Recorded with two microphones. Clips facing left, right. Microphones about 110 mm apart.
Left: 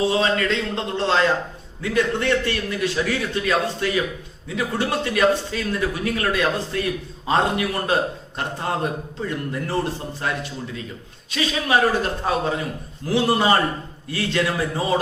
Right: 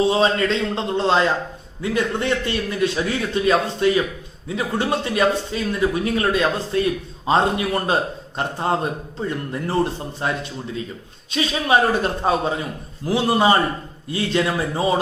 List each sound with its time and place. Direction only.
0.1 s a man's voice: 20° right (ahead or behind)